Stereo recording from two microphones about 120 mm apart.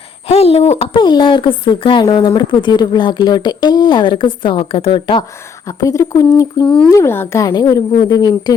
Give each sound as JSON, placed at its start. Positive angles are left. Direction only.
{"t": 0.3, "sound": "speech", "side_deg": 55}
{"t": 0.9, "sound": "a woman's voice", "side_deg": 40}
{"t": 5.6, "sound": "speech", "side_deg": 25}
{"t": 7.4, "sound": "a woman's voice", "side_deg": 30}